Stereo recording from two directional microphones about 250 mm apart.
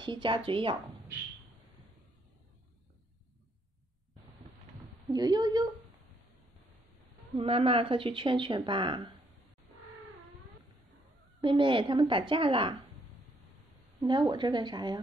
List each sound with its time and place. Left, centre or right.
0.0 s speech: centre
5.1 s speech: centre
7.3 s speech: right
11.4 s speech: centre
14.0 s speech: centre